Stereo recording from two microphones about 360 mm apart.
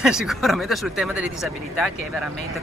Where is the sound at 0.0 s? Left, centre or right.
Centre.